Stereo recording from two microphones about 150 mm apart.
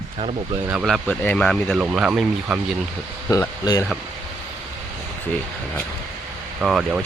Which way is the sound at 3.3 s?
25° left (ahead or behind).